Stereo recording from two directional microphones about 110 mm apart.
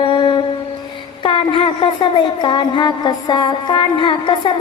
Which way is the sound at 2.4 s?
45° left (ahead or behind).